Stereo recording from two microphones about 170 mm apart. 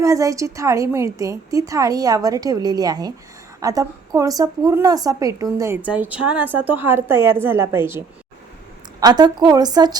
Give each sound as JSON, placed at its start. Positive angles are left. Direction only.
{"t": 0.0, "sound": "a woman's voice", "side_deg": -20}